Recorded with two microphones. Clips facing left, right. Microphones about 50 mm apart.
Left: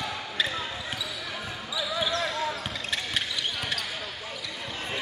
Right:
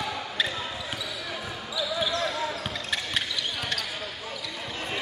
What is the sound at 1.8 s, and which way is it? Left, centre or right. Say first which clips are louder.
Basketball bounce: right 1 dB; centre.